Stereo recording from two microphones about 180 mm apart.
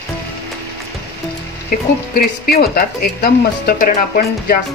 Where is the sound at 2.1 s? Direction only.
55° left (ahead or behind).